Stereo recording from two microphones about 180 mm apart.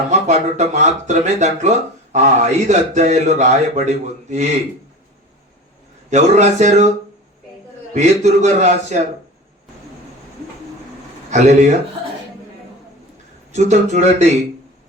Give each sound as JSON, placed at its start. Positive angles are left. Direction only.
{"t": 0.1, "sound": "a man's voice", "side_deg": -40}
{"t": 6.1, "sound": "a man's voice", "side_deg": -40}
{"t": 7.9, "sound": "a man's voice", "side_deg": -40}
{"t": 11.3, "sound": "a man's voice", "side_deg": -40}
{"t": 13.5, "sound": "a man's voice", "side_deg": -40}